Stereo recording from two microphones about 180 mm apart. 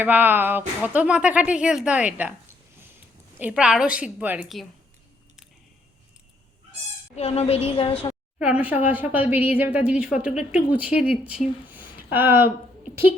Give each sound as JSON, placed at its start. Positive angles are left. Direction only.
{"t": 0.0, "sound": "speech", "side_deg": -10}
{"t": 3.3, "sound": "a woman's voice", "side_deg": -5}
{"t": 7.2, "sound": "a woman's voice", "side_deg": 35}
{"t": 8.4, "sound": "speech", "side_deg": -5}